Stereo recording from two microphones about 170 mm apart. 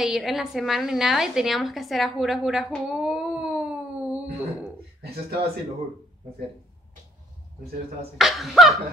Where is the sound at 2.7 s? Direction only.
Centre (ahead or behind).